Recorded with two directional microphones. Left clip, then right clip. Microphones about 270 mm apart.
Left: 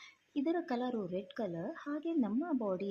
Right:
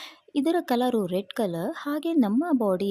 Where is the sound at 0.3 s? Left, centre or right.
Right.